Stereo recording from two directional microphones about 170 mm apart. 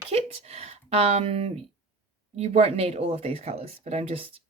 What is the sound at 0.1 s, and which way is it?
Speech, 35° right (ahead or behind).